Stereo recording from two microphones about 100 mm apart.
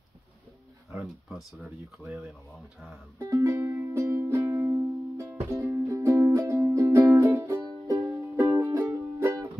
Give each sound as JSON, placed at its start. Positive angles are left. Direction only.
{"t": 0.9, "sound": "speech", "side_deg": -5}
{"t": 3.2, "sound": "music", "side_deg": -30}